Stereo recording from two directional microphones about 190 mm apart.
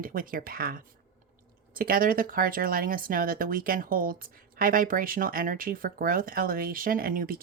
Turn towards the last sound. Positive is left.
turn(degrees=-50)  # may be behind; listen again after turning